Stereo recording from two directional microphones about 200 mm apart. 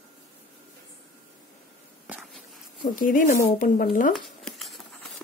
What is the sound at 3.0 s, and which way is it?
A woman's voice, 40° left (ahead or behind).